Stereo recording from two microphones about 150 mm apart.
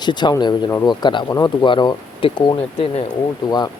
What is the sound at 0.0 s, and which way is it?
Speech, 30° left (ahead or behind).